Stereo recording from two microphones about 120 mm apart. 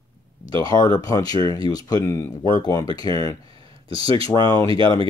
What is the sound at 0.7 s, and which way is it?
Speech, 30° left (ahead or behind).